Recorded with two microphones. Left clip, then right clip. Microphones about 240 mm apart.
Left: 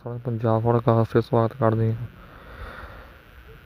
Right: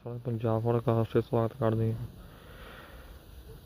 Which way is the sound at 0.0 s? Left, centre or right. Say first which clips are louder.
Left 7 dB; left.